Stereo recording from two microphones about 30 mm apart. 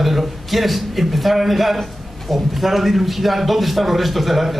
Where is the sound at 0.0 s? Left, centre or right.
Centre.